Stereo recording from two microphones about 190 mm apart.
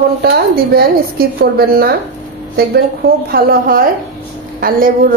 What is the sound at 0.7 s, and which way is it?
A woman's voice, 55° right (ahead or behind).